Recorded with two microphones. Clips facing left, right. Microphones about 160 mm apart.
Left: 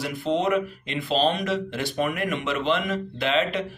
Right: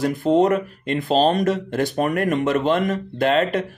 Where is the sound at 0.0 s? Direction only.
45° right (ahead or behind).